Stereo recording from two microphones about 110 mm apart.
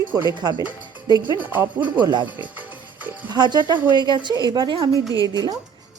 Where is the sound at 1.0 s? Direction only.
35° right (ahead or behind).